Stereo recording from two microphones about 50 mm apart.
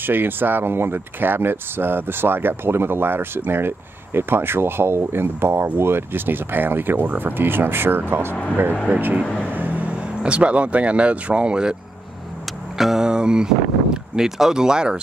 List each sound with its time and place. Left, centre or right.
0.0 s speech: right
9.5 s vehicle: right
10.2 s speech: right
12.7 s mantra: centre
13.0 s speech: centre